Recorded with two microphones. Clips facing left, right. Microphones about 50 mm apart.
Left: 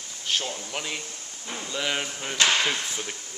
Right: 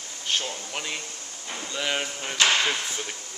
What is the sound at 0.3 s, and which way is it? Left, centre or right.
Speech, centre.